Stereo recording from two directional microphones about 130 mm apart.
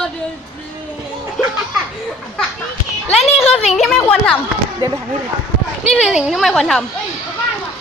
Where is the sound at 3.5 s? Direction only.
55° left (ahead or behind).